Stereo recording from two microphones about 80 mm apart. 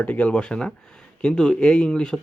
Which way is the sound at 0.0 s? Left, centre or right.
Centre.